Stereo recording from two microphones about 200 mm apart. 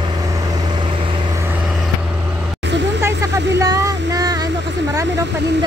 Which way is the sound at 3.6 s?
15° right (ahead or behind).